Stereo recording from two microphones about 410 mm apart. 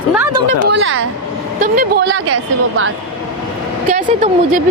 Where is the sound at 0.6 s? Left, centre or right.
Right.